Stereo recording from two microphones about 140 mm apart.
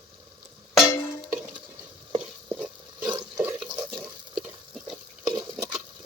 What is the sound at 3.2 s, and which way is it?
Water, 15° right (ahead or behind).